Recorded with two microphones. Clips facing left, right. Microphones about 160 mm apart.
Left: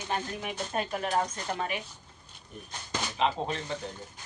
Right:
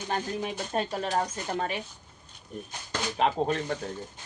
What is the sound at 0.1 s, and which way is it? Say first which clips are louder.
A man's voice: right 3 dB; 30° right (ahead or behind).